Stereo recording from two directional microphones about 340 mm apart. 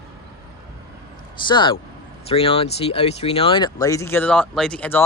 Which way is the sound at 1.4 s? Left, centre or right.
Centre.